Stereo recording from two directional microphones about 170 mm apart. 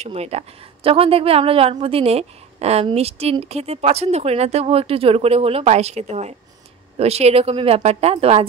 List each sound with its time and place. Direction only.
0.0 s a woman's voice: 40° right (ahead or behind)